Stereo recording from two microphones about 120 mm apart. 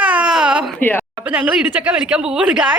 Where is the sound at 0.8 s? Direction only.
15° left (ahead or behind).